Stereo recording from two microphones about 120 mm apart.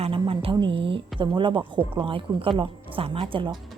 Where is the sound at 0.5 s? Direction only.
45° right (ahead or behind).